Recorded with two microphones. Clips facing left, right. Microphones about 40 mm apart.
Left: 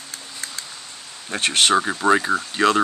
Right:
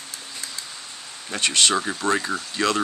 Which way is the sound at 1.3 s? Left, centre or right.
Left.